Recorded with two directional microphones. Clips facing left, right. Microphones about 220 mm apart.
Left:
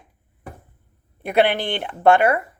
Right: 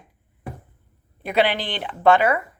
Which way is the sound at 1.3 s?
55° left (ahead or behind).